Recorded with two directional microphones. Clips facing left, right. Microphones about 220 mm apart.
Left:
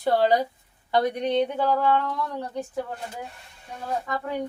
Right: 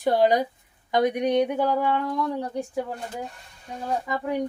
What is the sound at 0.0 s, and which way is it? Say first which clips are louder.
A woman's voice: right 1 dB; 15° right (ahead or behind).